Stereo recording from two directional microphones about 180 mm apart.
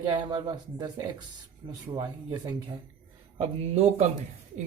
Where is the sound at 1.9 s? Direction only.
15° right (ahead or behind).